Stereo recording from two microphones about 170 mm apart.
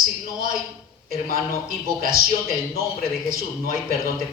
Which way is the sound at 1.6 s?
55° right (ahead or behind).